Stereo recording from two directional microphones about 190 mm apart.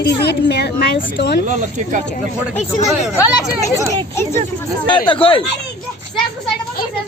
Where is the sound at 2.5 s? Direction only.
35° left (ahead or behind).